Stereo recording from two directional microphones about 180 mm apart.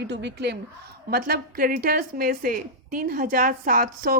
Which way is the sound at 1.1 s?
55° right (ahead or behind).